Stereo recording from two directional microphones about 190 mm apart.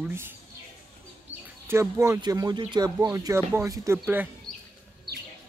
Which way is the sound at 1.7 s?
15° right (ahead or behind).